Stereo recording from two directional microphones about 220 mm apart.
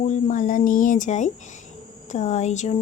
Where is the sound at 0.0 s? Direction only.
35° left (ahead or behind).